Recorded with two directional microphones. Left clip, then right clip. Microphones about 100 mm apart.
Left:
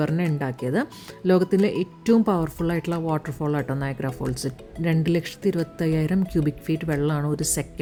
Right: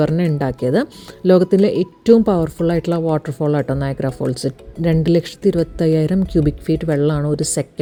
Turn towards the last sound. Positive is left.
turn(degrees=-40)  # may be behind; listen again after turning